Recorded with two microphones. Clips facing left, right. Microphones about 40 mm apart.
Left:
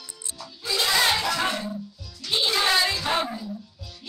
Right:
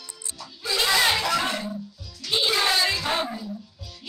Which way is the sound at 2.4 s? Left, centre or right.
Centre.